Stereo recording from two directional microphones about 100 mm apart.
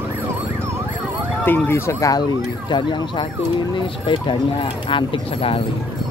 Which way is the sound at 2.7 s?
50° left (ahead or behind).